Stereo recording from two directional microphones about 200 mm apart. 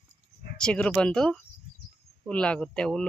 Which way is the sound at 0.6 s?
5° left (ahead or behind).